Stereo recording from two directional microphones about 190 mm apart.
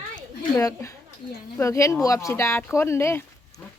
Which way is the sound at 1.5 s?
15° left (ahead or behind).